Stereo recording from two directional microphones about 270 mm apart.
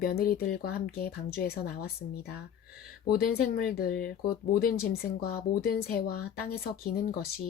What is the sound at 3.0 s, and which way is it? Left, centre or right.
Speech, left.